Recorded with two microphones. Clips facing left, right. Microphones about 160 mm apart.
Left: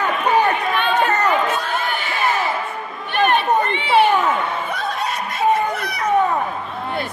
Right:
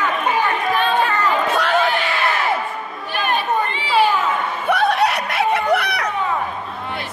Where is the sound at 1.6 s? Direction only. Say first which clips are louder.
Right 6 dB; 75° right (ahead or behind).